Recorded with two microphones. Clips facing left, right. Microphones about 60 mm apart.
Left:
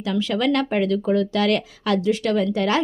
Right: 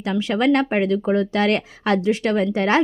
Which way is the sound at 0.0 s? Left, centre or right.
Right.